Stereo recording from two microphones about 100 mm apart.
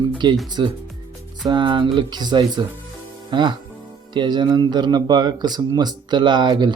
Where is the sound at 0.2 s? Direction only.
50° right (ahead or behind).